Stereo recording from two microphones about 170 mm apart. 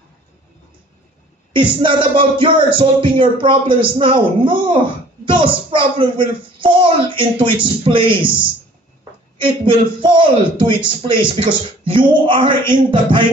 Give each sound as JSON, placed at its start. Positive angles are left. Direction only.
{"t": 1.5, "sound": "speech", "side_deg": -30}